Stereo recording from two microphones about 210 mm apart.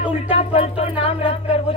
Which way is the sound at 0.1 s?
25° left (ahead or behind).